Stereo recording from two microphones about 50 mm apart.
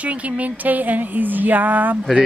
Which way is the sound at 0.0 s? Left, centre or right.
Right.